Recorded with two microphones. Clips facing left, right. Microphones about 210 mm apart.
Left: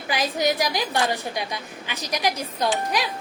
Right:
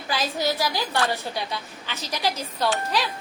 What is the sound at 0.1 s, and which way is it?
A woman's voice, 15° left (ahead or behind).